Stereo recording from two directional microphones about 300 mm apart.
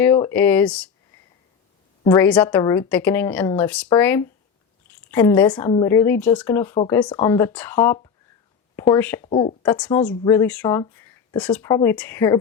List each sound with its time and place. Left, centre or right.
0.0 s speech: centre
2.0 s speech: centre
9.2 s speech: centre
9.6 s speech: centre